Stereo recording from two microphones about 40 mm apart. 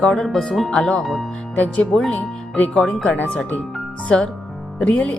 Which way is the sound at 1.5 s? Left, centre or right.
Left.